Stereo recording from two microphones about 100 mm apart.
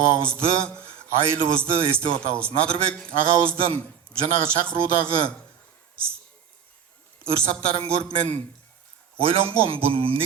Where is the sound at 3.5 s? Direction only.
65° right (ahead or behind).